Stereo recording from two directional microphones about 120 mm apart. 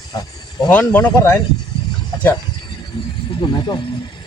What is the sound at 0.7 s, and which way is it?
Speech, 10° left (ahead or behind).